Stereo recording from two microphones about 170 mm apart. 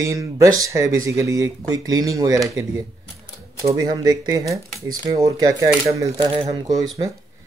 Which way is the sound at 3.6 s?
20° right (ahead or behind).